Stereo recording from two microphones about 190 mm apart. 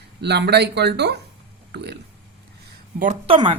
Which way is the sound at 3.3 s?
25° right (ahead or behind).